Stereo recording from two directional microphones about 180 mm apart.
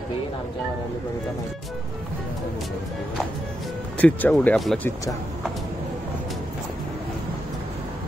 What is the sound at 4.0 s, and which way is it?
Speech, 10° left (ahead or behind).